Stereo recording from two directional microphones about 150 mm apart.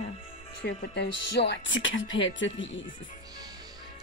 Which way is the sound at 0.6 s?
90° left.